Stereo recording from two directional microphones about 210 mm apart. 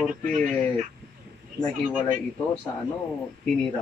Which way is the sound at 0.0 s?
Centre (ahead or behind).